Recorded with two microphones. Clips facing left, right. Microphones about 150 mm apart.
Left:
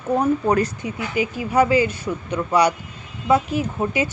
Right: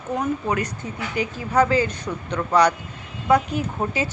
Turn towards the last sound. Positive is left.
turn(degrees=5)  # may be behind; listen again after turning